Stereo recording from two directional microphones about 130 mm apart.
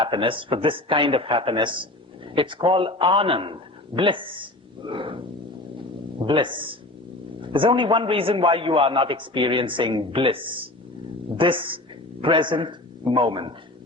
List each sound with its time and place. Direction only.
0.0 s a man's voice: 40° right (ahead or behind)